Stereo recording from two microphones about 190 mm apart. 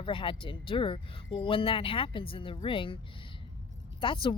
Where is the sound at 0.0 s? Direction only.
25° left (ahead or behind).